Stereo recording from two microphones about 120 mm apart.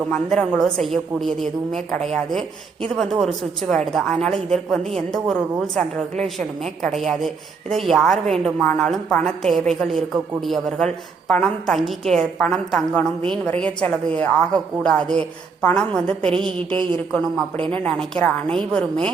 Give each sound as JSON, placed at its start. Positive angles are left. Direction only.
{"t": 0.1, "sound": "a woman's voice", "side_deg": 5}
{"t": 16.7, "sound": "speech", "side_deg": -40}
{"t": 17.7, "sound": "a woman's voice", "side_deg": 10}